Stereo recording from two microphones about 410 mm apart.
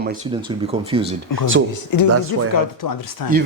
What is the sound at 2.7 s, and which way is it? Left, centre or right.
Speech, left.